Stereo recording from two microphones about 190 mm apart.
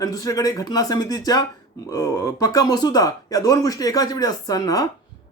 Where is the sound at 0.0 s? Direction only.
20° left (ahead or behind).